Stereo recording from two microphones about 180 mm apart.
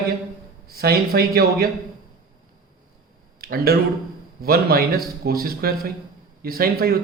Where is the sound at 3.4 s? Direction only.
55° right (ahead or behind).